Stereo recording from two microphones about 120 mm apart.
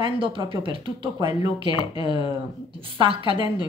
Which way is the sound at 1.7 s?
40° left (ahead or behind).